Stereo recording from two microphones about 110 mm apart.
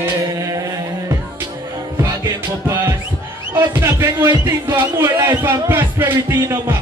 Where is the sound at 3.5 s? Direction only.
20° right (ahead or behind).